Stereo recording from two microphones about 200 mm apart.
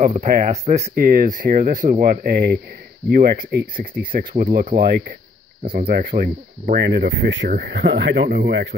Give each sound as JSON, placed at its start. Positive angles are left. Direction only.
{"t": 0.0, "sound": "speech", "side_deg": -35}